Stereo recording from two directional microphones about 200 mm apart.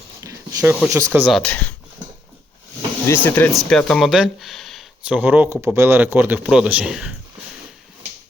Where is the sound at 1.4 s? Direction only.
5° left (ahead or behind).